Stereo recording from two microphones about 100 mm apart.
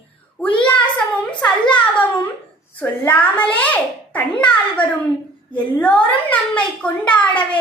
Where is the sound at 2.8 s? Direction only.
15° left (ahead or behind).